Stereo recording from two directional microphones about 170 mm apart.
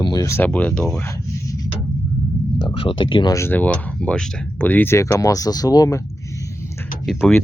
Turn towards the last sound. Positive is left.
turn(degrees=0)  # may be behind; listen again after turning